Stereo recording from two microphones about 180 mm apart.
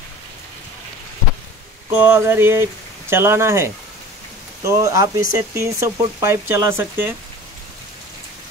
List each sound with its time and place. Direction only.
1.9 s speech: 10° right (ahead or behind)